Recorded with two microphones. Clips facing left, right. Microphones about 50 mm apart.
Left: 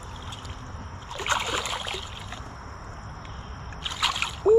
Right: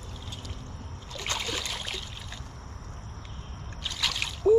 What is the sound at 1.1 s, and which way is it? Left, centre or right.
Boat, left.